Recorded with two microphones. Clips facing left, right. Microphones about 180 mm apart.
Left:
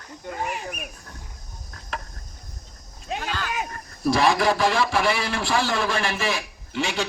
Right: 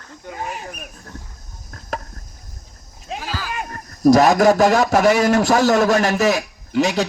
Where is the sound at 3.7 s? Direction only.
45° right (ahead or behind).